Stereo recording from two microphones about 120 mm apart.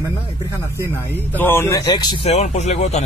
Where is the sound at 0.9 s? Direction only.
15° left (ahead or behind).